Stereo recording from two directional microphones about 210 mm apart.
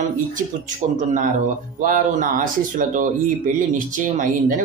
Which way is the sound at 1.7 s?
40° right (ahead or behind).